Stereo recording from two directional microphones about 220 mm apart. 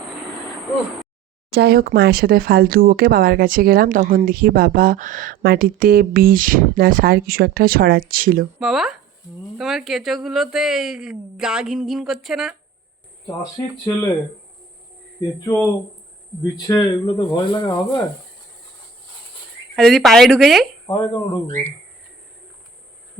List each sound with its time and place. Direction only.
1.5 s speech: 45° right (ahead or behind)
8.5 s speech: centre (ahead or behind)
13.4 s speech: 15° left (ahead or behind)
16.4 s speech: 15° left (ahead or behind)
19.7 s speech: 5° left (ahead or behind)
20.9 s speech: 20° left (ahead or behind)